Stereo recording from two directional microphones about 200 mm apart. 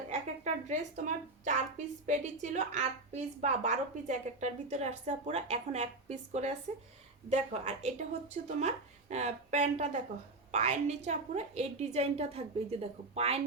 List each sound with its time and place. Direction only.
0.1 s a woman's voice: 35° right (ahead or behind)